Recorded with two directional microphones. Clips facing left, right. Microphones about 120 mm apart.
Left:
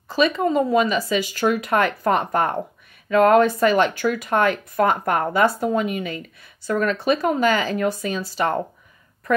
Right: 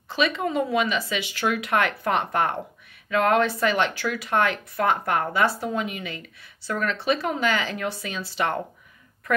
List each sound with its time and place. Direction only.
0.1 s speech: 40° left (ahead or behind)